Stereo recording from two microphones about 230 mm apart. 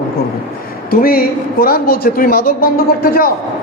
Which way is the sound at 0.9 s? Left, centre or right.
Left.